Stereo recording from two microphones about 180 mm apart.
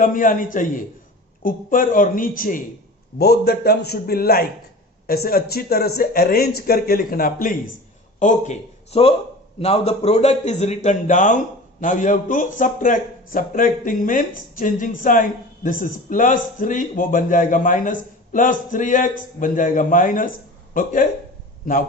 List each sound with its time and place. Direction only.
0.0 s a man's voice: 50° left (ahead or behind)
3.2 s a man's voice: 60° left (ahead or behind)
8.2 s a man's voice: 40° left (ahead or behind)